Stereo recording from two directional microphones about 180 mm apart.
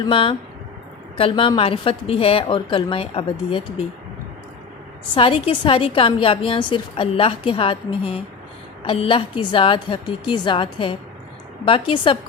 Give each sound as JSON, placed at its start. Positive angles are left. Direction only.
{"t": 0.0, "sound": "a woman's voice", "side_deg": 30}
{"t": 5.1, "sound": "a woman's voice", "side_deg": 30}